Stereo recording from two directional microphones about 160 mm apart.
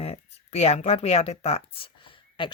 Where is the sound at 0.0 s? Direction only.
40° left (ahead or behind).